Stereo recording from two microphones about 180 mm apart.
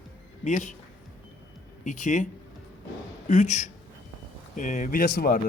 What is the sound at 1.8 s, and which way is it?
Speech, 45° left (ahead or behind).